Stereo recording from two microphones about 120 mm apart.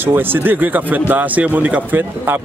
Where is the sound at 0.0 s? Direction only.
15° right (ahead or behind).